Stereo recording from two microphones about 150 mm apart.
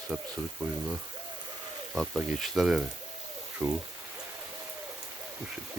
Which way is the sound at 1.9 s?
Centre (ahead or behind).